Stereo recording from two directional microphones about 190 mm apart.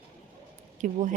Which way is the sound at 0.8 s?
40° right (ahead or behind).